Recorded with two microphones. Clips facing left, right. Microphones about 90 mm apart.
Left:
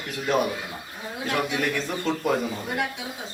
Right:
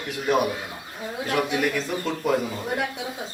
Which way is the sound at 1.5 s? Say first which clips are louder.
Right 2 dB; 5° right (ahead or behind).